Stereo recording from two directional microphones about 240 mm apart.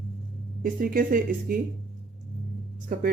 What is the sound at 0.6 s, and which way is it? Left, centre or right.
Speech, right.